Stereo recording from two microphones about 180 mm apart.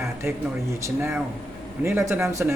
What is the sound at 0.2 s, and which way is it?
Speech, 15° right (ahead or behind).